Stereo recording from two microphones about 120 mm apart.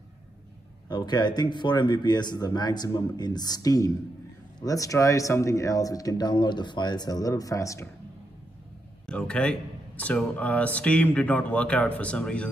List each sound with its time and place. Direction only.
0.8 s speech: 35° left (ahead or behind)
9.0 s speech: 5° left (ahead or behind)